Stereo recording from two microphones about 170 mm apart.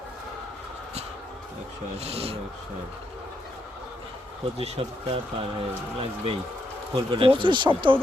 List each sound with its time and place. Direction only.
2.0 s speech: 35° right (ahead or behind)
4.5 s speech: 35° right (ahead or behind)